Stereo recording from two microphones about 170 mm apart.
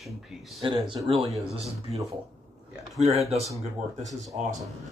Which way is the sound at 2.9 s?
40° right (ahead or behind).